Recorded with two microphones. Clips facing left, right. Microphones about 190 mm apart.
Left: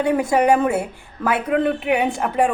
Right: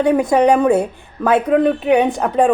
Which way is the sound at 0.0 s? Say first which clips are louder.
Right 4 dB; 20° right (ahead or behind).